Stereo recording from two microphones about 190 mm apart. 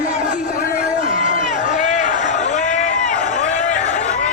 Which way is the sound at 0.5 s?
50° left (ahead or behind).